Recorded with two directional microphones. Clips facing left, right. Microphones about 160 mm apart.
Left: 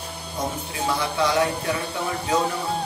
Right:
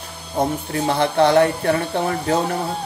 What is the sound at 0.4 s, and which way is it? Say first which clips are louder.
Speech: right 7 dB; 60° right (ahead or behind).